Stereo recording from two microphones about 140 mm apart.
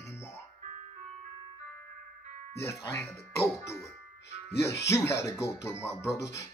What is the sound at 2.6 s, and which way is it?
Speech, 20° left (ahead or behind).